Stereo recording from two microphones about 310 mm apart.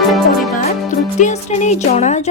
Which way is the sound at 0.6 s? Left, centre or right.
Left.